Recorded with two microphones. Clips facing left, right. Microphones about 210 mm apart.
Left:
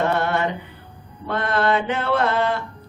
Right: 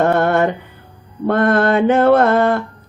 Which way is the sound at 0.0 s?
50° right (ahead or behind).